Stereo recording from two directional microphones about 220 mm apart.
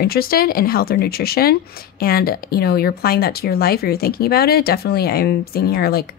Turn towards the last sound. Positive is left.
turn(degrees=45)  # may be behind; listen again after turning